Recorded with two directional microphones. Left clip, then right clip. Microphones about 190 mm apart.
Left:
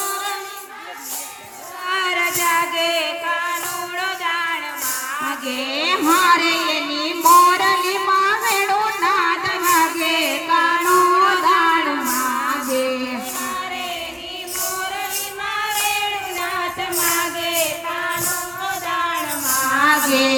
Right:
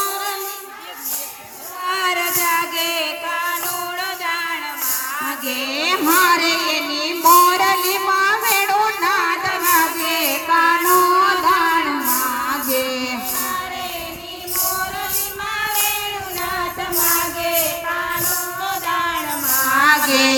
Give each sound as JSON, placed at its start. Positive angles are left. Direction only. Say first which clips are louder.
{"t": 1.9, "sound": "music", "louder": "even", "side_deg": -15}
{"t": 5.7, "sound": "child singing", "louder": "even", "side_deg": -30}
{"t": 9.6, "sound": "child singing", "louder": "left 1 dB", "side_deg": -15}
{"t": 12.8, "sound": "child singing", "louder": "left 1 dB", "side_deg": -35}
{"t": 18.6, "sound": "music", "louder": "right 1 dB", "side_deg": -15}
{"t": 19.8, "sound": "music", "louder": "right 2 dB", "side_deg": -30}